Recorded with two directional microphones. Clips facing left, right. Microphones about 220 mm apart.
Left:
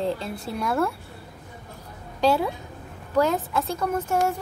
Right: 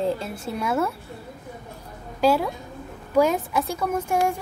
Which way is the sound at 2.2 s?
5° right (ahead or behind).